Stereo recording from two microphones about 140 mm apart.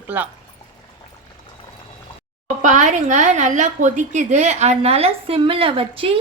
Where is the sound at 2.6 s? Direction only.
60° right (ahead or behind).